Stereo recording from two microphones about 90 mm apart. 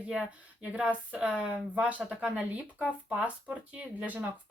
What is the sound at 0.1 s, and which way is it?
Speech, 15° right (ahead or behind).